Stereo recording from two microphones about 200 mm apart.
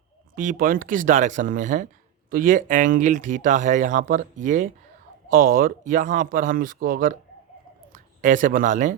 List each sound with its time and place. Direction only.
0.3 s speech: 40° right (ahead or behind)